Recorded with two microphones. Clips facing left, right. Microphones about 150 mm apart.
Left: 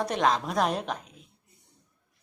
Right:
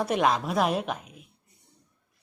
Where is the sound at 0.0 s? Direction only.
10° right (ahead or behind).